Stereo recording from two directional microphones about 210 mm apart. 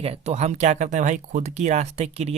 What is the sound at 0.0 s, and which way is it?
Speech, 30° right (ahead or behind).